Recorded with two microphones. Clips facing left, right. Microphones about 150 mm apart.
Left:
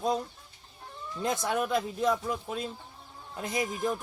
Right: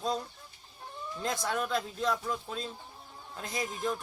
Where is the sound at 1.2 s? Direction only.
15° left (ahead or behind).